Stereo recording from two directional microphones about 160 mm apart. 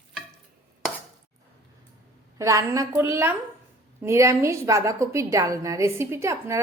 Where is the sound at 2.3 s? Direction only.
20° right (ahead or behind).